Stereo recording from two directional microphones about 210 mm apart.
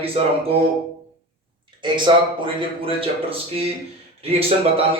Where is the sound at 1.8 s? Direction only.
20° right (ahead or behind).